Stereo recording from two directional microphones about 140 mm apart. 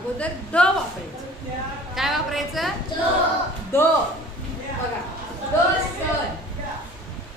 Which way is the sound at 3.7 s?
15° left (ahead or behind).